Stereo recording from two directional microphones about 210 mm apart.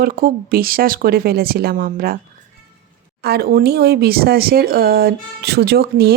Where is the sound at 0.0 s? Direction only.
45° right (ahead or behind).